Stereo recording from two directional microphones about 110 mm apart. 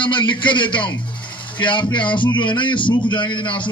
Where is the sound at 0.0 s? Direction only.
45° left (ahead or behind).